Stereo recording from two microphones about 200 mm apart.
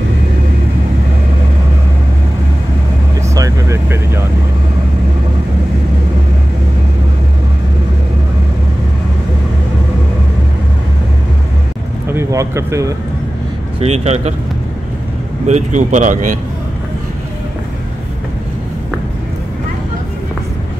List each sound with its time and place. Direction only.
3.2 s vehicle: 15° right (ahead or behind)
12.1 s a sound: 15° right (ahead or behind)
13.7 s speech: 30° right (ahead or behind)
15.4 s speech: 35° right (ahead or behind)